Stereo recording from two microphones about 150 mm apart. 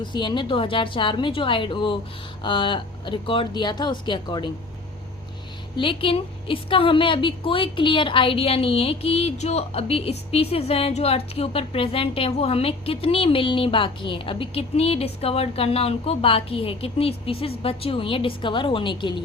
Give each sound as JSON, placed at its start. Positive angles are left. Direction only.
{"t": 0.0, "sound": "a woman's voice", "side_deg": 30}
{"t": 5.7, "sound": "a woman's voice", "side_deg": 35}